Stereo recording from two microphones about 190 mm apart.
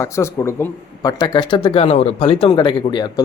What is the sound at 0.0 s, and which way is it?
Speech, 15° left (ahead or behind).